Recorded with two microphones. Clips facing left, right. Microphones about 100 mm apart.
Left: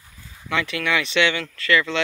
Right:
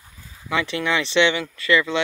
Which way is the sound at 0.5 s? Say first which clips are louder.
Right 1 dB; 20° right (ahead or behind).